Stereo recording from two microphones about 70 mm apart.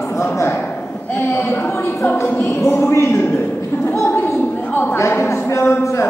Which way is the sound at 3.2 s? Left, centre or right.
Left.